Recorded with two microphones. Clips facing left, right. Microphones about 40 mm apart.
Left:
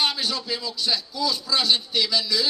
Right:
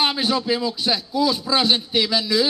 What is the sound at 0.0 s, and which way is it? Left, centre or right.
Speech, right.